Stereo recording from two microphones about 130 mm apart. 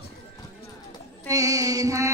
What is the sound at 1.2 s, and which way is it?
Music, 25° right (ahead or behind).